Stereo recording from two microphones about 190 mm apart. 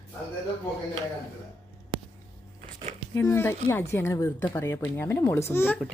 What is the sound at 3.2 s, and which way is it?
Speech, 15° left (ahead or behind).